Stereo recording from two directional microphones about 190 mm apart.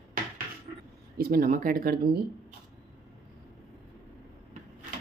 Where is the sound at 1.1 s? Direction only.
50° right (ahead or behind).